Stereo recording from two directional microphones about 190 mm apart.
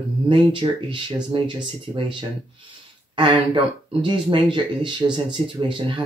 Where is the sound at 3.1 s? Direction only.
25° right (ahead or behind).